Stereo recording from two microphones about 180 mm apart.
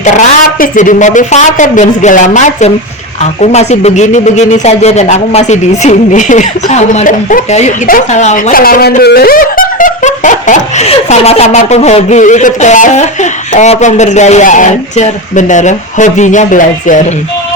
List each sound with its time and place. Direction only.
0.6 s a man's voice: 45° left (ahead or behind)